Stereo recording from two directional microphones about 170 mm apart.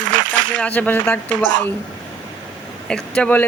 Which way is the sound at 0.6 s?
10° left (ahead or behind).